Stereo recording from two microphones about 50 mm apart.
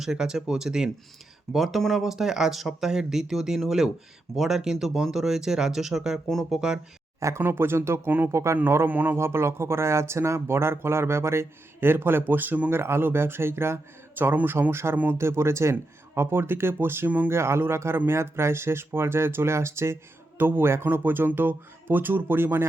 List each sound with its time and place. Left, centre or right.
0.0 s speech: centre
1.5 s speech: centre
7.2 s speech: right
7.4 s speech: right
8.3 s a man's voice: right
8.9 s speech: right
9.1 s speech: right
12.7 s speech: right
15.7 s speech: right
17.2 s speech: right
20.4 s speech: right
20.8 s speech: right